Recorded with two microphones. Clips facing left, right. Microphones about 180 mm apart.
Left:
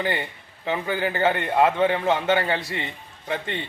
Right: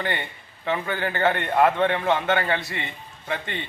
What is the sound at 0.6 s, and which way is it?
Speech, 25° left (ahead or behind).